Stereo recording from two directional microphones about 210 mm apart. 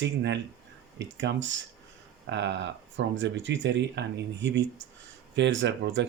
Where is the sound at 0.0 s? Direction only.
55° right (ahead or behind).